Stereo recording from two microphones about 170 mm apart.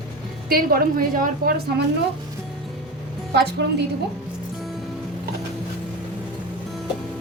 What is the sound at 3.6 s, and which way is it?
Speech, 80° right.